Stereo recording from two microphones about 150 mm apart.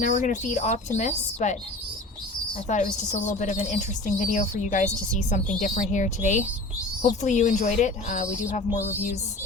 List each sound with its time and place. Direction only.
0.0 s a woman's voice: 60° left (ahead or behind)
2.6 s a woman's voice: 55° left (ahead or behind)